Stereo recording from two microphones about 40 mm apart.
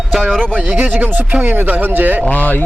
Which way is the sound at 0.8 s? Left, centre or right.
Right.